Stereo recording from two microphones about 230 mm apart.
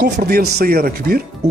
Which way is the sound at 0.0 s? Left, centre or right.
Right.